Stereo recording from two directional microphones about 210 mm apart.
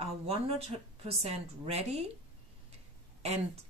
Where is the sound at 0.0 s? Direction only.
30° right (ahead or behind).